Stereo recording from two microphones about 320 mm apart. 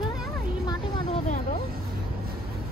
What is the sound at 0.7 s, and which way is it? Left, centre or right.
Speech, centre.